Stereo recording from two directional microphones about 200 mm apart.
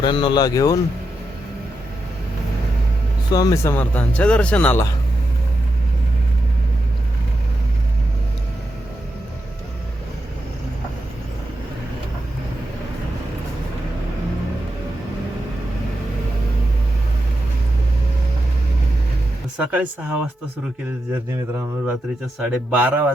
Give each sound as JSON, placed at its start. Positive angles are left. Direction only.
{"t": 0.0, "sound": "speech", "side_deg": 25}
{"t": 3.3, "sound": "speech", "side_deg": 15}
{"t": 19.5, "sound": "speech", "side_deg": -5}
{"t": 22.4, "sound": "speech", "side_deg": -10}